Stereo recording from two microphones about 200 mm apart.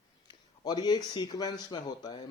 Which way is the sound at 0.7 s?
20° left (ahead or behind).